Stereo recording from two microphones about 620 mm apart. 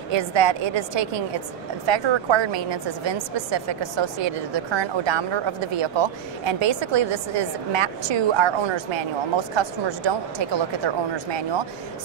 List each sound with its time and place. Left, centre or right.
0.1 s a woman's voice: right